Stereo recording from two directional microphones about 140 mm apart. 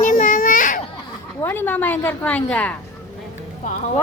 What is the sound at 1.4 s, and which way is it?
A woman's voice, 15° left (ahead or behind).